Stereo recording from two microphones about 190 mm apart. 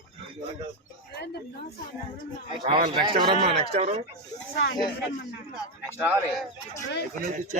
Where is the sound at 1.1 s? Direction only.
60° left (ahead or behind).